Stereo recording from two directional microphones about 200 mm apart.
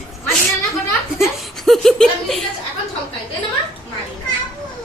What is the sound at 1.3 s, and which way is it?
A woman's voice, centre (ahead or behind).